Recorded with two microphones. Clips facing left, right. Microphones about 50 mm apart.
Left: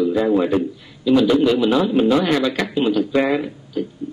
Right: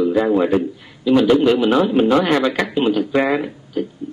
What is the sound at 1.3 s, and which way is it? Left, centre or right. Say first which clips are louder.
A man's voice: right 2 dB; right.